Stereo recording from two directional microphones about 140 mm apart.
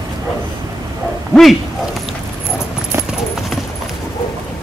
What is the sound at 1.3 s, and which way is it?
Dog, centre (ahead or behind).